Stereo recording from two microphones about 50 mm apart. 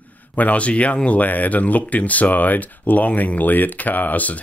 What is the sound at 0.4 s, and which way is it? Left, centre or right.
Speech, left.